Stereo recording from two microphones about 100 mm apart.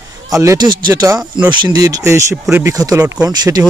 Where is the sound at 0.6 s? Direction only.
50° right (ahead or behind).